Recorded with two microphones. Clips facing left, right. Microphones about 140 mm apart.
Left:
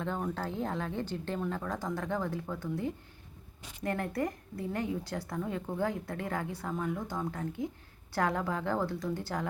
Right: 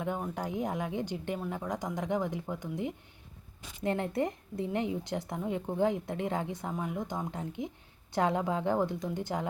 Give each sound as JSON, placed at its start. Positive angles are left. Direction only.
{"t": 0.0, "sound": "a woman's voice", "side_deg": -15}